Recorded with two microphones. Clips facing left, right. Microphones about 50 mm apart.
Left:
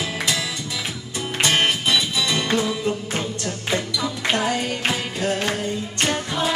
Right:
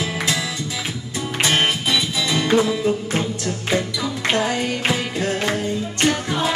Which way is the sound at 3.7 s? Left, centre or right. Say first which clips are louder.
Right 2 dB; centre.